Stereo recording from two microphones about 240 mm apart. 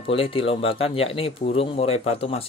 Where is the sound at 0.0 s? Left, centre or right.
Left.